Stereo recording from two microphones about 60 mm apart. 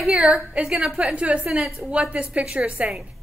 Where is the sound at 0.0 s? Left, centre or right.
Centre.